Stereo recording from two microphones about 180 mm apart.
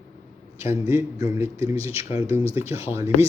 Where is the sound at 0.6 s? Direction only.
15° right (ahead or behind).